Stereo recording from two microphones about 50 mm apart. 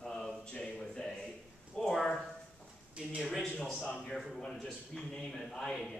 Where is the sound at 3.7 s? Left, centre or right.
Centre.